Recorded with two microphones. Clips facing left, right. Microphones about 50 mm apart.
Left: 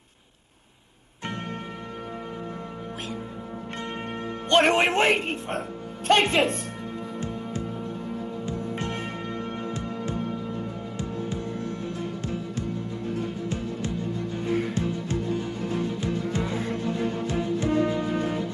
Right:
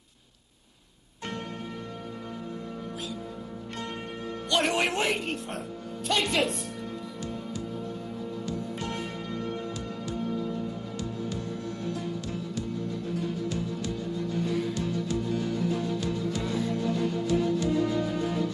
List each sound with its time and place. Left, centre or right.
4.5 s a woman's voice: left
8.5 s music: left
17.6 s music: left